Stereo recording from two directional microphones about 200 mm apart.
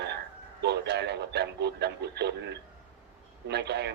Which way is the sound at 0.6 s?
55° right (ahead or behind).